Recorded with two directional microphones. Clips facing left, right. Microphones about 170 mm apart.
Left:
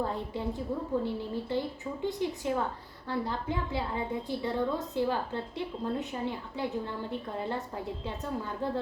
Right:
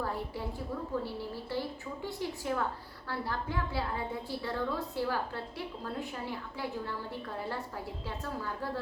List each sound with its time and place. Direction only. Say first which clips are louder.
0.0 s a woman's voice: left 3 dB; 20° left (ahead or behind)